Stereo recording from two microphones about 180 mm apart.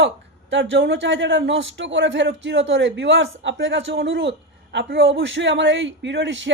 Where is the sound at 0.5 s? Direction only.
85° right.